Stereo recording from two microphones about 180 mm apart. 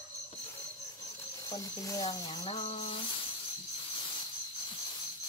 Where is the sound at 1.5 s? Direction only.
20° left (ahead or behind).